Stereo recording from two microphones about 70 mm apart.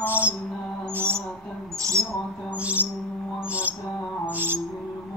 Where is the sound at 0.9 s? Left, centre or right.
Right.